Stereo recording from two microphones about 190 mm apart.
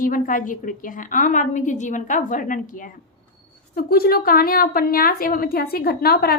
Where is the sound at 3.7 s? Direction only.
55° left (ahead or behind).